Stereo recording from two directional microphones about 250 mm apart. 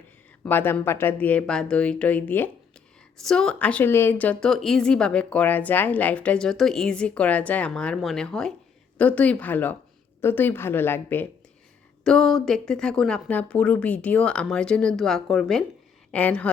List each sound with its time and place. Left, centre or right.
0.4 s a woman's voice: centre